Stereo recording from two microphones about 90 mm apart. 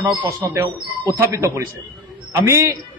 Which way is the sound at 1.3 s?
30° right (ahead or behind).